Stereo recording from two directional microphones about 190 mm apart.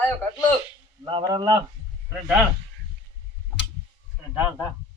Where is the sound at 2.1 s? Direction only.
5° right (ahead or behind).